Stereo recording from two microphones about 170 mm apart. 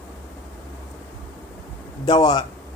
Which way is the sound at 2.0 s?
25° left (ahead or behind).